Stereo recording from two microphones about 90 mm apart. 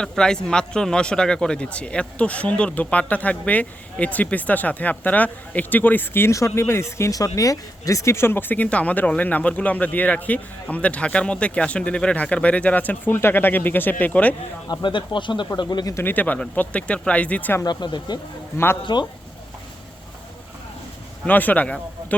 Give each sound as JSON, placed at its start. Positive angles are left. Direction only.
{"t": 0.0, "sound": "a man's voice", "side_deg": 10}
{"t": 14.7, "sound": "speech", "side_deg": 60}
{"t": 16.0, "sound": "a man's voice", "side_deg": 20}
{"t": 17.7, "sound": "speech", "side_deg": 55}
{"t": 18.5, "sound": "speech", "side_deg": 25}
{"t": 18.8, "sound": "speech", "side_deg": 55}
{"t": 21.2, "sound": "a man's voice", "side_deg": 20}